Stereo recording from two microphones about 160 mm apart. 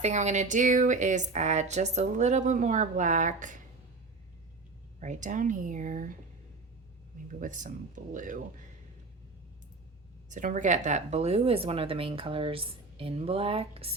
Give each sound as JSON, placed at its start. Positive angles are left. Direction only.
{"t": 0.0, "sound": "speech", "side_deg": -45}
{"t": 4.9, "sound": "speech", "side_deg": -50}
{"t": 7.3, "sound": "speech", "side_deg": -55}
{"t": 10.2, "sound": "speech", "side_deg": -50}